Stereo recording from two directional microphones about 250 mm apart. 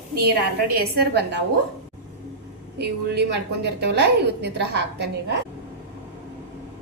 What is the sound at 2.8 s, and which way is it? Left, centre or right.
A woman's voice, right.